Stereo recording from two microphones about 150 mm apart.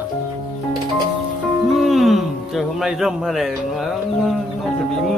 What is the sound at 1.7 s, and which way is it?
Speech, centre (ahead or behind).